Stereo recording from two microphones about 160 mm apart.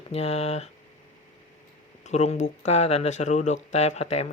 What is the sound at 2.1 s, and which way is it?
Speech, 45° left (ahead or behind).